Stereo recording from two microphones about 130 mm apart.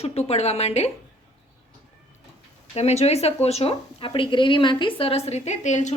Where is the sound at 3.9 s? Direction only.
40° left (ahead or behind).